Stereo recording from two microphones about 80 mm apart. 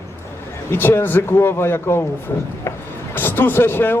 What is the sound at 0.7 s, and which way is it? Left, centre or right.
Speech, left.